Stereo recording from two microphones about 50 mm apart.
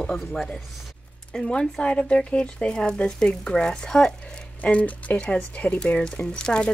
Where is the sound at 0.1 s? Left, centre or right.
Centre.